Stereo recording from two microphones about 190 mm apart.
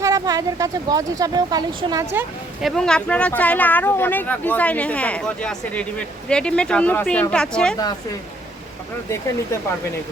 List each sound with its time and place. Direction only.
0.0 s speech: 20° right (ahead or behind)
2.1 s speech: centre (ahead or behind)